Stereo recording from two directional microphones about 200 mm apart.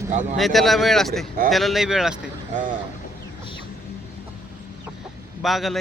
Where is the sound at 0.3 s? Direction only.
Centre (ahead or behind).